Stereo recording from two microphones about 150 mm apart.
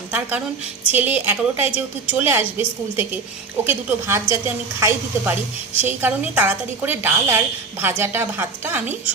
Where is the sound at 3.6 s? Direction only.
15° right (ahead or behind).